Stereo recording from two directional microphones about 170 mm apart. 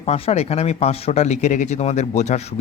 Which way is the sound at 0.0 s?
35° left (ahead or behind).